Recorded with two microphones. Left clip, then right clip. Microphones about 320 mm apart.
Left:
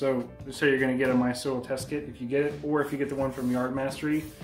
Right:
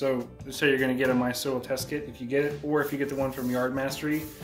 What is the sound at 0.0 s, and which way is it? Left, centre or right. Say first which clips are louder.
Speech: even; centre.